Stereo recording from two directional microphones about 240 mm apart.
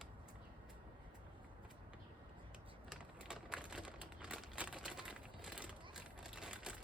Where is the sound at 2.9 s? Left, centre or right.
Centre.